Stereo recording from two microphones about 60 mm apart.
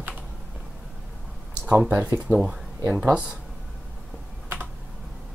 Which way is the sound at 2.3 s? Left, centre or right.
Left.